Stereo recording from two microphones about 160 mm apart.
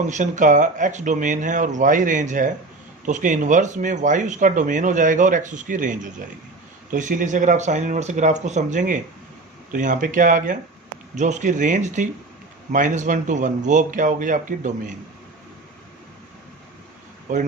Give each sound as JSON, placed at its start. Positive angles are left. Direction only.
{"t": 0.1, "sound": "speech", "side_deg": -50}